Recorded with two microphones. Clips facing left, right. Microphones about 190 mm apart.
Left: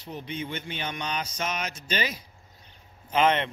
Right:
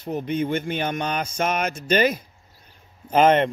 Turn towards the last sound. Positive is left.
turn(degrees=-45)  # may be behind; listen again after turning